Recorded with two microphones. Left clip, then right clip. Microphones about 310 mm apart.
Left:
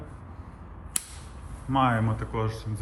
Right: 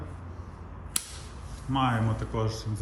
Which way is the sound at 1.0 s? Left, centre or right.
Centre.